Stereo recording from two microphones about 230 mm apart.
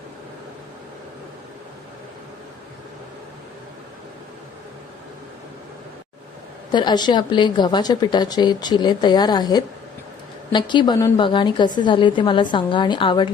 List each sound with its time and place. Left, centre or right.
6.7 s a woman's voice: centre